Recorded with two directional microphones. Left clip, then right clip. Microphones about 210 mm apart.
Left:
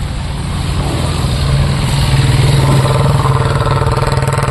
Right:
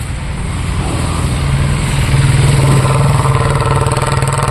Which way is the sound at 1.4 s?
45° left (ahead or behind).